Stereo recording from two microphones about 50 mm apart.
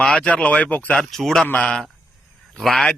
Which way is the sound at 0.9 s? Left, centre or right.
Centre.